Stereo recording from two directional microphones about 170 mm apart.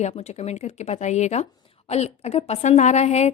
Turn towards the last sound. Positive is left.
turn(degrees=40)  # may be behind; listen again after turning